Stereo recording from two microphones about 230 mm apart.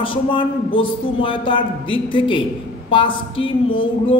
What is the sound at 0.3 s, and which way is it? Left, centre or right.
A woman's voice, left.